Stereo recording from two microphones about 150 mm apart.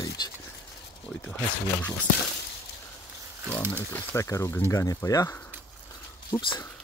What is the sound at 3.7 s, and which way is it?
Speech, 10° left (ahead or behind).